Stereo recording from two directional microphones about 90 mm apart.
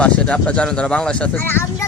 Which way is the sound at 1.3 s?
25° left (ahead or behind).